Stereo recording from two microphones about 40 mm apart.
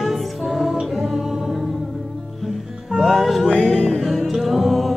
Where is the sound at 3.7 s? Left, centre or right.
Left.